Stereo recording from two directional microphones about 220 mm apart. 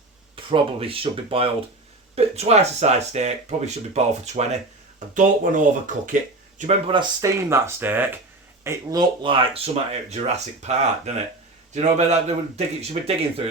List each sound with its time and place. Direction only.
0.5 s speech: 25° right (ahead or behind)
6.6 s speech: 25° right (ahead or behind)